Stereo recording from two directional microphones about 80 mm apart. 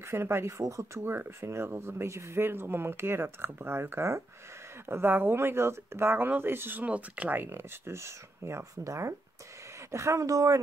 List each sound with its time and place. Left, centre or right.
0.0 s speech: right
7.4 s speech: right